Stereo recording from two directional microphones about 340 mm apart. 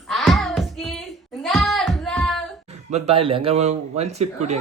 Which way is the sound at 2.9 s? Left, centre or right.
Centre.